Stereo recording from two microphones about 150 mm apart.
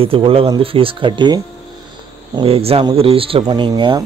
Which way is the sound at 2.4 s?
40° right (ahead or behind).